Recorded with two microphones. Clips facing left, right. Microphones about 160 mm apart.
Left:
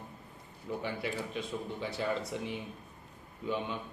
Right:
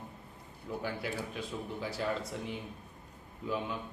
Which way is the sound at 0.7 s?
Centre (ahead or behind).